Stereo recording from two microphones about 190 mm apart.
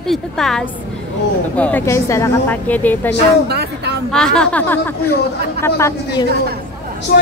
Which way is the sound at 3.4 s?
60° right (ahead or behind).